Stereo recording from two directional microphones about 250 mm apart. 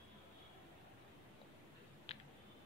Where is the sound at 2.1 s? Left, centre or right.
Left.